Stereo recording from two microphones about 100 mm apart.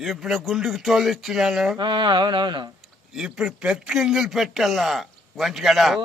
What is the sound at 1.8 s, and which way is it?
Speech, 50° right (ahead or behind).